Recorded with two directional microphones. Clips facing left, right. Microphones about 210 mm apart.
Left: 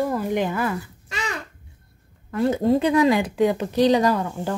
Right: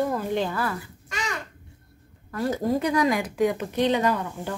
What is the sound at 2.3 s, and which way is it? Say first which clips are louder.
Speech: left 5 dB; 25° left (ahead or behind).